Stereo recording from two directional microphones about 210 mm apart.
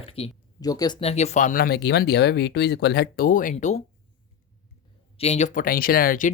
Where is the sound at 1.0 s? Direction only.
30° left (ahead or behind).